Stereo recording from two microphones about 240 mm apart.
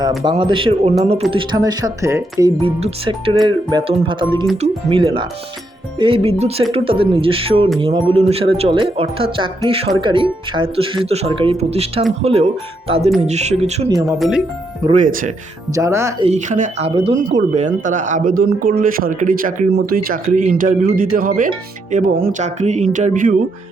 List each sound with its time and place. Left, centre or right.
0.2 s speech: centre
14.2 s speech: centre
14.9 s speech: right
15.7 s speech: centre
16.2 s speech: right